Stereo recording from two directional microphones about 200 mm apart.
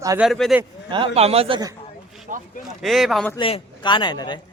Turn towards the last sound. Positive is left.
turn(degrees=20)  # may be behind; listen again after turning